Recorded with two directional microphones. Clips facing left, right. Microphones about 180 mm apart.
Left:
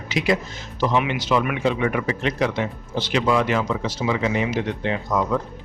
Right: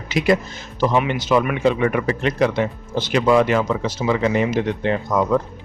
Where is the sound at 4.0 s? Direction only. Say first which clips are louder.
Right 3 dB; 35° right (ahead or behind).